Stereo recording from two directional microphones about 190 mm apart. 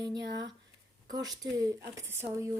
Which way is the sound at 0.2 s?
65° right (ahead or behind).